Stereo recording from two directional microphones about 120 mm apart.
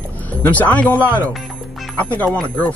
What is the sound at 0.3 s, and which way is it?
Speech, 10° left (ahead or behind).